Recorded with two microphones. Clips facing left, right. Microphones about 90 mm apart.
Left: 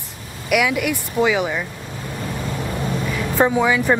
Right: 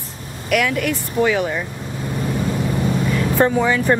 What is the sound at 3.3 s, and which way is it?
Speech, 10° left (ahead or behind).